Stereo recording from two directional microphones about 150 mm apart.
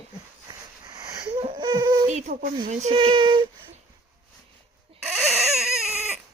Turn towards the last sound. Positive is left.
turn(degrees=-5)  # may be behind; listen again after turning